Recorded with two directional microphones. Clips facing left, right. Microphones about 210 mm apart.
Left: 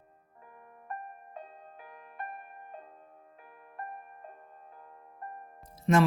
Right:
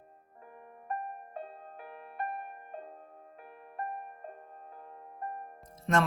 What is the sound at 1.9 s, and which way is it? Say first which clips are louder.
Music: right 5 dB; 35° right (ahead or behind).